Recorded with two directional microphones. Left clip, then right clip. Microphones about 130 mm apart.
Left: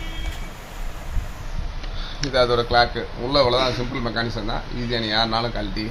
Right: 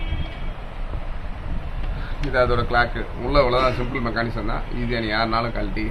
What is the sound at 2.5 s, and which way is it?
A man's voice, 90° left.